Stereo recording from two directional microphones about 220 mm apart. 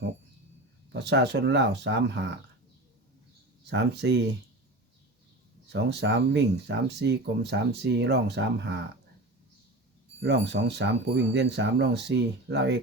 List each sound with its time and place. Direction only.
0.9 s speech: 50° right (ahead or behind)
3.7 s speech: 50° right (ahead or behind)
5.6 s speech: 50° right (ahead or behind)
10.2 s speech: 55° right (ahead or behind)